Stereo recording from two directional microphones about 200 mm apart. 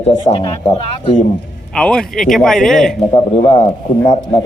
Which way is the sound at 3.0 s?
30° left (ahead or behind).